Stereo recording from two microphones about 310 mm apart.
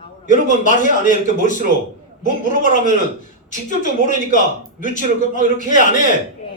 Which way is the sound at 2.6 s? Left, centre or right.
Left.